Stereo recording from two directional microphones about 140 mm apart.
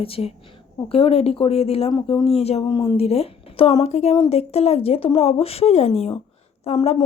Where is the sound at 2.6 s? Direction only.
35° left (ahead or behind).